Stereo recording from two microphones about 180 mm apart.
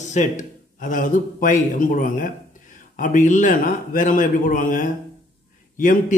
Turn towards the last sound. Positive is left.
turn(degrees=45)  # may be behind; listen again after turning